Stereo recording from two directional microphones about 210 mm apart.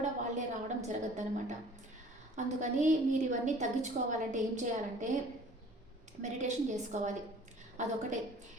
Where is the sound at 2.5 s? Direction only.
35° right (ahead or behind).